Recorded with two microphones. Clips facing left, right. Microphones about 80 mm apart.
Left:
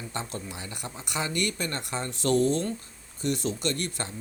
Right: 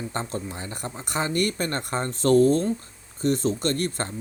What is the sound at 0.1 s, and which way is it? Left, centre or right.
Speech, right.